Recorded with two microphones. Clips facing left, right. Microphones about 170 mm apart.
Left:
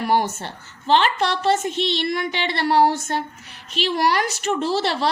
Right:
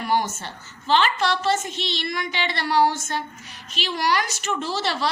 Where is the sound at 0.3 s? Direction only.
60° left (ahead or behind).